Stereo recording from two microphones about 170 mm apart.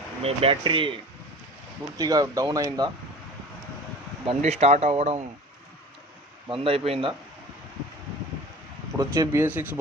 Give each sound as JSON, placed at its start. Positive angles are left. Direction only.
{"t": 0.2, "sound": "speech", "side_deg": -35}
{"t": 2.0, "sound": "speech", "side_deg": -20}
{"t": 4.3, "sound": "speech", "side_deg": -40}
{"t": 6.5, "sound": "speech", "side_deg": -35}
{"t": 9.0, "sound": "speech", "side_deg": -20}